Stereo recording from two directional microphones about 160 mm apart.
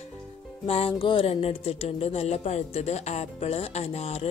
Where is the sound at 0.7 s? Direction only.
35° left (ahead or behind).